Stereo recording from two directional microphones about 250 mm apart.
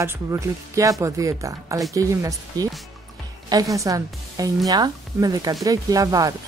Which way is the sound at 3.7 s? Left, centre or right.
Centre.